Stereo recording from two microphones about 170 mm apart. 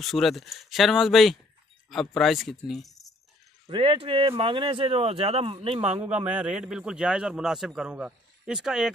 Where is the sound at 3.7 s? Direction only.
30° right (ahead or behind).